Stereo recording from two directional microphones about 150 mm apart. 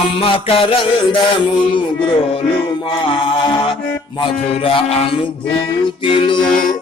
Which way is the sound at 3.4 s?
30° left (ahead or behind).